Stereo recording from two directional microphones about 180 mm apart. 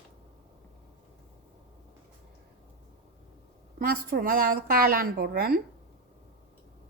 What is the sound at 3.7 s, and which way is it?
A woman's voice, 55° right (ahead or behind).